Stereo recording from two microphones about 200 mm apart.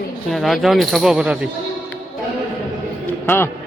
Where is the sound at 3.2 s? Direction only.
10° left (ahead or behind).